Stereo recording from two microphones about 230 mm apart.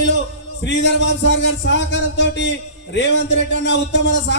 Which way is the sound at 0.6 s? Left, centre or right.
Left.